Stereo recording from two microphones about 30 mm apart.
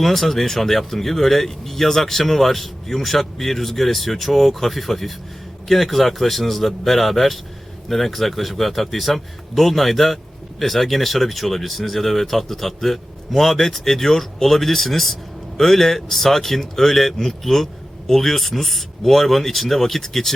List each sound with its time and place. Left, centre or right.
0.0 s speech: centre